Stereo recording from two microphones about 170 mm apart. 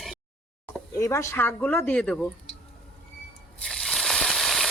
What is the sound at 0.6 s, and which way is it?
Speech, 15° left (ahead or behind).